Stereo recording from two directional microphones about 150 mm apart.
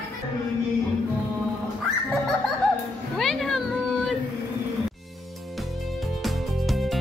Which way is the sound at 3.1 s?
Centre (ahead or behind).